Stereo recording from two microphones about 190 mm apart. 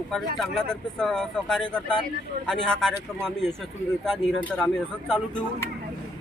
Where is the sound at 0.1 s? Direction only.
Centre (ahead or behind).